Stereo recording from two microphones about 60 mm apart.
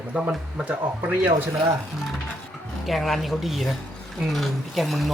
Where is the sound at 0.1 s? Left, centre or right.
Centre.